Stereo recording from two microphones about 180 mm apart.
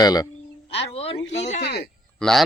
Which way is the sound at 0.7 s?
35° left (ahead or behind).